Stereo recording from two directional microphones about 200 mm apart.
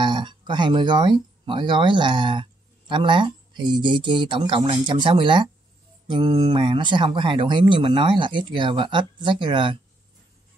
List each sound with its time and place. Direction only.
0.0 s speech: 25° right (ahead or behind)